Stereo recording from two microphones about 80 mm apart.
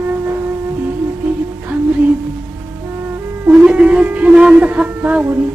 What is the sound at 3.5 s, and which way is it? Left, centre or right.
Music, centre.